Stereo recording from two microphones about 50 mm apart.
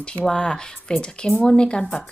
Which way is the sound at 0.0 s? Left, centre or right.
Centre.